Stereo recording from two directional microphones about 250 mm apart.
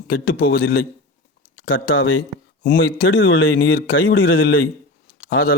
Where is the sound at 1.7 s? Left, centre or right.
Left.